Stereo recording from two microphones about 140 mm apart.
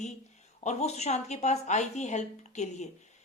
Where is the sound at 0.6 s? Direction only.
55° left (ahead or behind).